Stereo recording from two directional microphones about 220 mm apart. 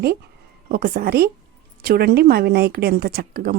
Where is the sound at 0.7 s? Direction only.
40° right (ahead or behind).